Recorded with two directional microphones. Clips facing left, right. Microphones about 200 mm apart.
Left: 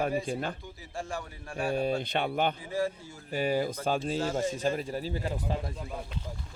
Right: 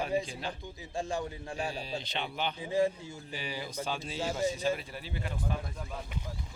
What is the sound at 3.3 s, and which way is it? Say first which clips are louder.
Speech: left 11 dB; 50° left (ahead or behind).